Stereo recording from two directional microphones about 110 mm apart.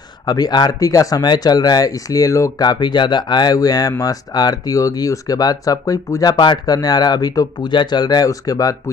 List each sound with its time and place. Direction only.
0.3 s speech: 40° left (ahead or behind)
6.3 s speech: 45° left (ahead or behind)